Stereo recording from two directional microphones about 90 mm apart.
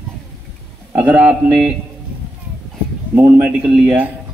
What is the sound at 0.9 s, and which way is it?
Speech, 15° right (ahead or behind).